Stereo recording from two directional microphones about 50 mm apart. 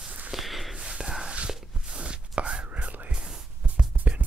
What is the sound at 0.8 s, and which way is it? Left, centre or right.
Whispering, centre.